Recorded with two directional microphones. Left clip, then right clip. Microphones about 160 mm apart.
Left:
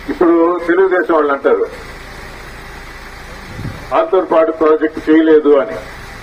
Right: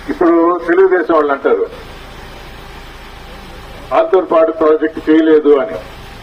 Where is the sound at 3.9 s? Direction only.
20° right (ahead or behind).